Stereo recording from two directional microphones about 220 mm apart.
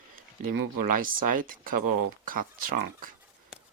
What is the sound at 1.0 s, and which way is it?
Speech, 40° right (ahead or behind).